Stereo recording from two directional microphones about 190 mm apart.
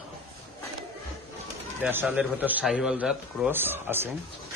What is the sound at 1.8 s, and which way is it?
A man's voice, 10° right (ahead or behind).